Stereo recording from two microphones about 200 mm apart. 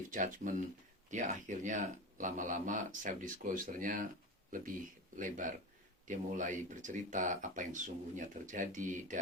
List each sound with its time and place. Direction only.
0.1 s speech: 40° right (ahead or behind)
5.1 s speech: 40° right (ahead or behind)